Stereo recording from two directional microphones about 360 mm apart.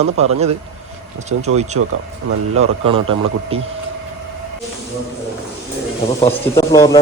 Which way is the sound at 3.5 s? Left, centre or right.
Centre.